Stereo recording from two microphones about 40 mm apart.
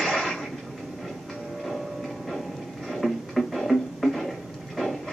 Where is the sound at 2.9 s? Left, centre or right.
Centre.